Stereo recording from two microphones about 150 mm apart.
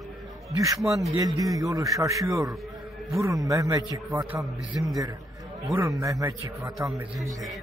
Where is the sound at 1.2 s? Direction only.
25° right (ahead or behind).